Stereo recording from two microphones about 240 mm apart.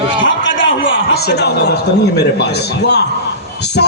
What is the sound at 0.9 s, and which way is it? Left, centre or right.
A man's voice, left.